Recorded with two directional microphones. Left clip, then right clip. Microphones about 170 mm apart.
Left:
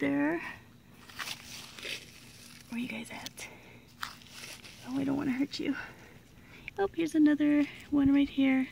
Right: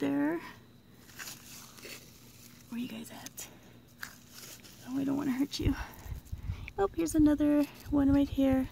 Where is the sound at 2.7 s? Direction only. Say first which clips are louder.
Left 3 dB; 30° left (ahead or behind).